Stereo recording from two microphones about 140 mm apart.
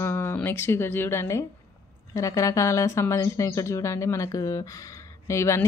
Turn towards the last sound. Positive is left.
turn(degrees=20)  # may be behind; listen again after turning